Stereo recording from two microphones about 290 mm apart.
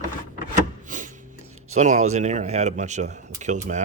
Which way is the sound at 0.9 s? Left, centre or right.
Right.